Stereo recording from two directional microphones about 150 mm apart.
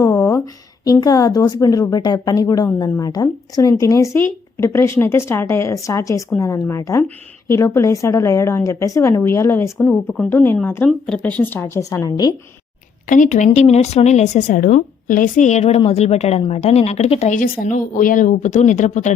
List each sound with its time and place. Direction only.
0.0 s a sound: 20° left (ahead or behind)
0.9 s a woman's voice: 25° left (ahead or behind)
10.8 s a woman's voice: 5° left (ahead or behind); by 12.3 s 25° left (ahead or behind)
13.1 s speech: 55° left (ahead or behind)